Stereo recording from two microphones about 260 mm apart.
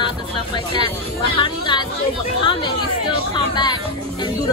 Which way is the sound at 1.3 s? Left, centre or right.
Centre.